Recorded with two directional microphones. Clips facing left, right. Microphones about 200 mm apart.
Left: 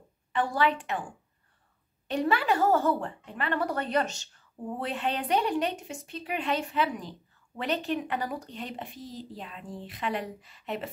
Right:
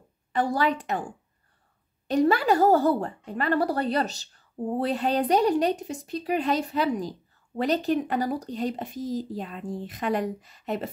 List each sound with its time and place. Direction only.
0.3 s a woman's voice: 40° right (ahead or behind)
2.0 s a woman's voice: 40° right (ahead or behind)